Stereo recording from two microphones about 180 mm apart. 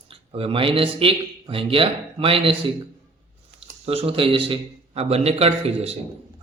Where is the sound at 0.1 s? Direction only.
30° right (ahead or behind).